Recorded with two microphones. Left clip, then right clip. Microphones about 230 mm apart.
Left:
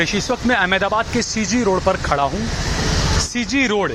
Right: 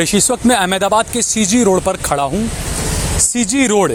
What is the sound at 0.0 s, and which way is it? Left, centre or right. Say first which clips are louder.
Speech: right 4 dB; right.